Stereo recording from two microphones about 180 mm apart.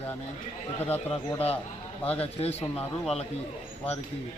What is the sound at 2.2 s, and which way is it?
Speech, 35° left (ahead or behind).